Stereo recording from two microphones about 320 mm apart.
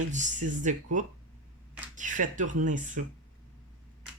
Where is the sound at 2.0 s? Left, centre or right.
Right.